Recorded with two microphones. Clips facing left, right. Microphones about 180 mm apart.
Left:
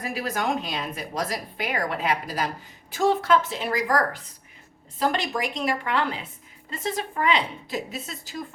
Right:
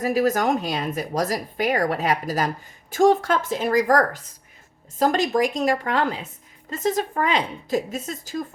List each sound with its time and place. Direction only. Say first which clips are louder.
0.0 s speech: right 8 dB; 45° right (ahead or behind)